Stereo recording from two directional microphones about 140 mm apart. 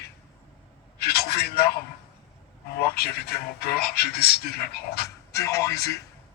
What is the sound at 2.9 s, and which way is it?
Speech, 90° left.